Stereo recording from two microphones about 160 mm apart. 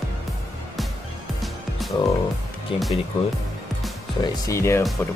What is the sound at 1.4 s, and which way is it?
Music, centre (ahead or behind).